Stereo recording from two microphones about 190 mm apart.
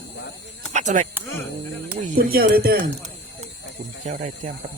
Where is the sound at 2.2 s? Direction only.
50° right (ahead or behind).